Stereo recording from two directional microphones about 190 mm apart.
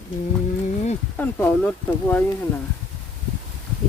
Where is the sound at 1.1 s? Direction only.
10° left (ahead or behind).